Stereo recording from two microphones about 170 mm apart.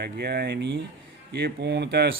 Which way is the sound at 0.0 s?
70° right (ahead or behind).